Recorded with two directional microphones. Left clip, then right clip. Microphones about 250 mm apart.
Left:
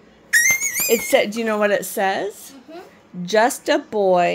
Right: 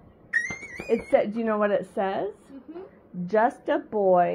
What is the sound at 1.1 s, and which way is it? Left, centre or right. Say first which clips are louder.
Speech: left 2 dB; centre.